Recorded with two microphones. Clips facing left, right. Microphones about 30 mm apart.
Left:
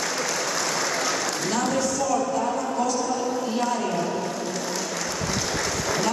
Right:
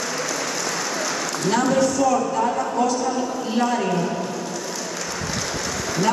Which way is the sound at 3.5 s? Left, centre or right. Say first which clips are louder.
Right 7 dB; right.